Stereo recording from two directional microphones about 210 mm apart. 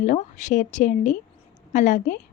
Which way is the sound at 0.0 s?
35° left (ahead or behind).